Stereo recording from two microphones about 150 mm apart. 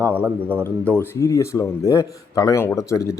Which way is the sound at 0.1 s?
10° right (ahead or behind).